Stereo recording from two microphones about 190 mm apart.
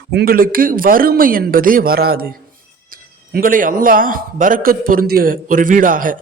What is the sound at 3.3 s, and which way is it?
Speech, 45° right (ahead or behind).